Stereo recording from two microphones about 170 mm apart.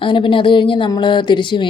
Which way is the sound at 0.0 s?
30° left (ahead or behind).